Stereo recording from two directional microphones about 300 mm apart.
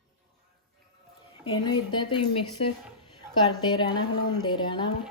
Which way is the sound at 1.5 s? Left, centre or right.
Centre.